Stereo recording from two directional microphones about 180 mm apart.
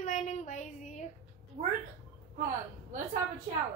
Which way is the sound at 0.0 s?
45° left (ahead or behind).